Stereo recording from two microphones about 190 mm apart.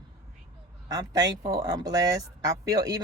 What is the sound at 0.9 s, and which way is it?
Speech, 20° right (ahead or behind).